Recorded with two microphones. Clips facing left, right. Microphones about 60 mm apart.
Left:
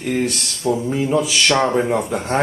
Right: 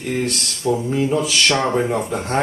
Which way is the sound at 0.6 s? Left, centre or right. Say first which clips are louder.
Even; left.